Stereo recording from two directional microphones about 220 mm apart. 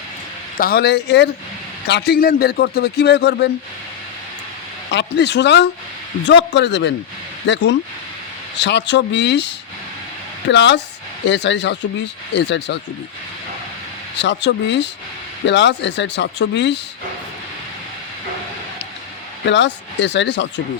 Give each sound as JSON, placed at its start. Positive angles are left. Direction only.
{"t": 0.5, "sound": "speech", "side_deg": 40}
{"t": 4.9, "sound": "speech", "side_deg": 50}
{"t": 10.5, "sound": "speech", "side_deg": 55}
{"t": 14.2, "sound": "speech", "side_deg": 50}
{"t": 19.5, "sound": "speech", "side_deg": 55}